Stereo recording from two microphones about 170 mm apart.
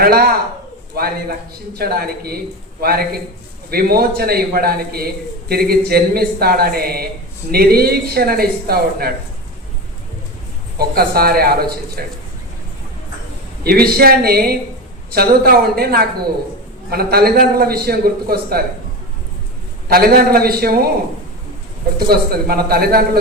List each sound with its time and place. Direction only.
0.0 s a man's voice: 65° right (ahead or behind)
10.8 s a man's voice: 65° right (ahead or behind)
13.7 s a man's voice: 65° right (ahead or behind)
19.9 s a man's voice: 65° right (ahead or behind)
22.1 s a man's voice: 65° right (ahead or behind)